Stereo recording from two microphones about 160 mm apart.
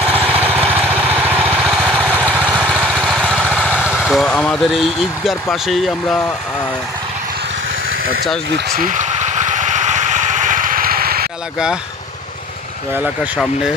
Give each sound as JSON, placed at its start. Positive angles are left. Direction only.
{"t": 0.1, "sound": "vehicle", "side_deg": -10}
{"t": 3.4, "sound": "speech", "side_deg": -5}
{"t": 8.5, "sound": "vehicle", "side_deg": -65}
{"t": 12.9, "sound": "speech", "side_deg": -10}